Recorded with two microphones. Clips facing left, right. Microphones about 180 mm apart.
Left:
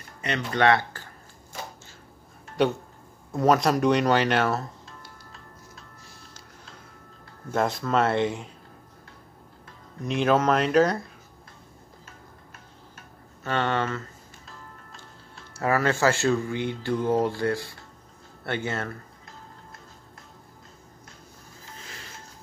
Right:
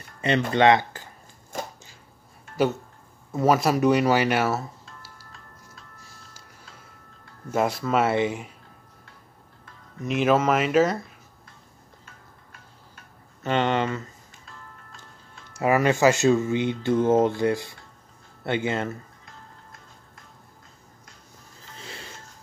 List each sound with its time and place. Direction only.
0.5 s speech: 20° right (ahead or behind)
2.5 s speech: 5° right (ahead or behind)
7.5 s speech: 5° right (ahead or behind)
10.0 s speech: 5° right (ahead or behind)
13.4 s speech: 20° right (ahead or behind)
15.5 s speech: 15° right (ahead or behind)
21.8 s music: 30° right (ahead or behind)